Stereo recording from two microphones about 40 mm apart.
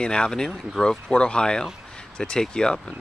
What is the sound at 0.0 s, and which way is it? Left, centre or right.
Speech, left.